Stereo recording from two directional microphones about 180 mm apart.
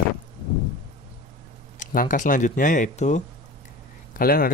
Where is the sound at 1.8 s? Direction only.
50° left (ahead or behind).